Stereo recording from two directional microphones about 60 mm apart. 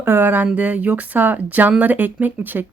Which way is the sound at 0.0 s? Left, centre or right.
Right.